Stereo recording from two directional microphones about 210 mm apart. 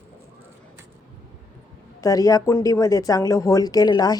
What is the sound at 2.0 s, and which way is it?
Speech, 15° left (ahead or behind).